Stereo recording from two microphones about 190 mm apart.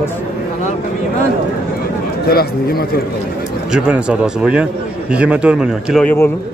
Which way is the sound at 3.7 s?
5° right (ahead or behind).